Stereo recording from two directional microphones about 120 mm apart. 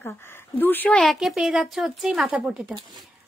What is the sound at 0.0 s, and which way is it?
Speech, 15° left (ahead or behind).